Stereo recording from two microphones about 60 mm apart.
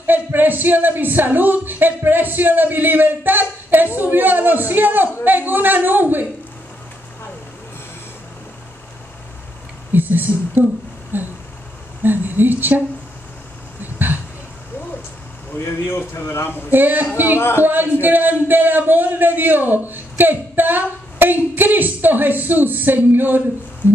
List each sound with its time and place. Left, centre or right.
0.0 s a man's voice: right
9.9 s a sound: right
12.0 s a woman's voice: right
13.9 s a sound: right
15.5 s speech: left
16.7 s a man's voice: right
17.4 s speech: left
17.6 s a man's voice: right